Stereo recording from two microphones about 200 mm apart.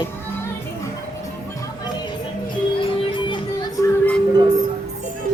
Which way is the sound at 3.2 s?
25° left (ahead or behind).